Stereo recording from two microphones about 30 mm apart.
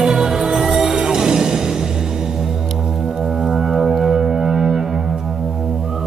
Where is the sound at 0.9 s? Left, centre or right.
Right.